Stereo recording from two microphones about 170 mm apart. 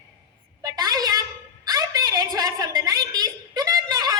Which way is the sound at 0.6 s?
20° right (ahead or behind).